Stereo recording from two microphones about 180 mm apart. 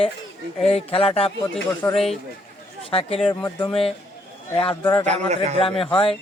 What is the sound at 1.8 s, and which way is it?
Speech, 10° left (ahead or behind).